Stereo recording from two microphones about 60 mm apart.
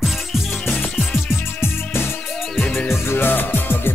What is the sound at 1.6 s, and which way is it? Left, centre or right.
Music, left.